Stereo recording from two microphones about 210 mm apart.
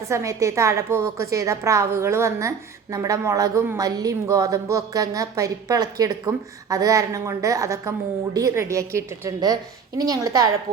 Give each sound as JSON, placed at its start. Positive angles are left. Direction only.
{"t": 0.0, "sound": "speech", "side_deg": -15}